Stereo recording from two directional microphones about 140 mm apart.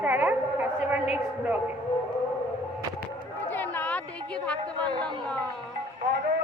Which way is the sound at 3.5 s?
15° left (ahead or behind).